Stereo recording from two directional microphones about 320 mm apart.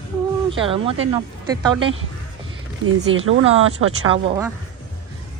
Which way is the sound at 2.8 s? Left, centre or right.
Right.